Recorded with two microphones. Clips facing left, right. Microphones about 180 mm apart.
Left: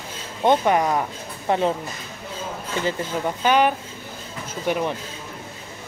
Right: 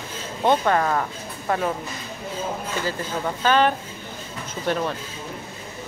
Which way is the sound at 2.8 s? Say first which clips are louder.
Left 5 dB; 20° left (ahead or behind).